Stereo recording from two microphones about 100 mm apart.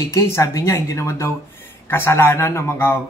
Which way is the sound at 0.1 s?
35° left (ahead or behind).